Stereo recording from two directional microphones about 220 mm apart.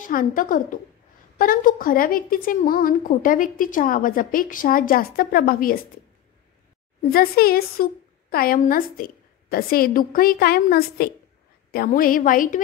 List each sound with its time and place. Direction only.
0.0 s a woman's voice: 40° left (ahead or behind)
7.1 s a woman's voice: 45° left (ahead or behind)